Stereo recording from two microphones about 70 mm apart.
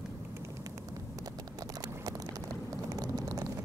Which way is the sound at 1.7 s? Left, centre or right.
Right.